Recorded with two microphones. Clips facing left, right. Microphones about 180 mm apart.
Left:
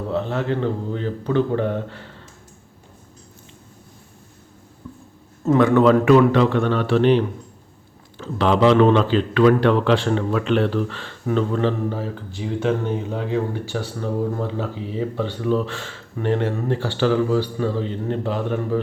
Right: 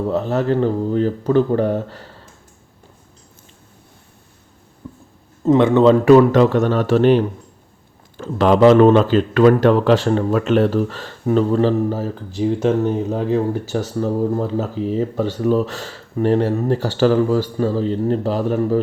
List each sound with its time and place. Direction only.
0.1 s speech: 40° right (ahead or behind)
4.8 s a sound: 25° right (ahead or behind)
5.5 s speech: 25° right (ahead or behind)